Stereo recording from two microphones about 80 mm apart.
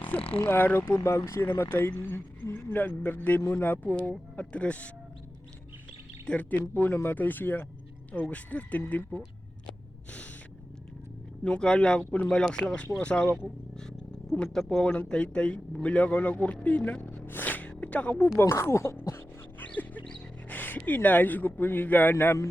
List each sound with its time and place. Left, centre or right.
0.1 s speech: left
0.9 s a man's voice: left; by 4.9 s centre
6.2 s speech: centre
11.4 s a man's voice: centre
17.2 s gasp: left
18.3 s speech: left
19.5 s music: centre
20.5 s speech: left